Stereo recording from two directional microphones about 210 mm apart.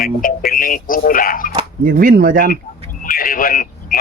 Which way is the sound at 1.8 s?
45° right (ahead or behind).